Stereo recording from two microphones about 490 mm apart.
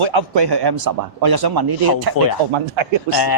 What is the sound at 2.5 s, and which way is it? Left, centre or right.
Speech, right.